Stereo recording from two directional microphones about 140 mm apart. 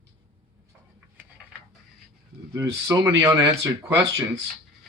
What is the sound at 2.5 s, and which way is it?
Speech, 20° right (ahead or behind).